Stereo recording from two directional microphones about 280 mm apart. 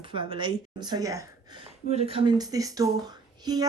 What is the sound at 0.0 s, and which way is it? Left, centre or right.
A woman's voice, centre.